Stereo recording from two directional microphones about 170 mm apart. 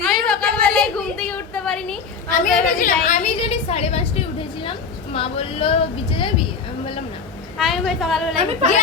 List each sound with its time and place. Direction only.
0.0 s a sound: 5° left (ahead or behind)
2.3 s a woman's voice: 55° left (ahead or behind); by 6.3 s 30° left (ahead or behind)
7.6 s a woman's voice: centre (ahead or behind)
8.4 s a woman's voice: 40° right (ahead or behind)